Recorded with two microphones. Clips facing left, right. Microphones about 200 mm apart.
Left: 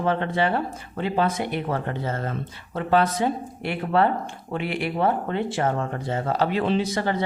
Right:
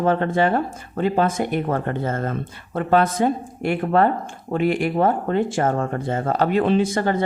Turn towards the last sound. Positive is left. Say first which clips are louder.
# right 4 dB
turn(degrees=-50)  # may be behind; listen again after turning